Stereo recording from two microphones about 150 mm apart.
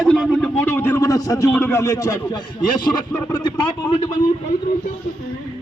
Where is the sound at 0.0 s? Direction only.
Centre (ahead or behind); by 2.4 s 25° left (ahead or behind).